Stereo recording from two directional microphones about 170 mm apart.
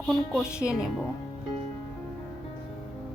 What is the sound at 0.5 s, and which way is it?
Speech, 15° left (ahead or behind).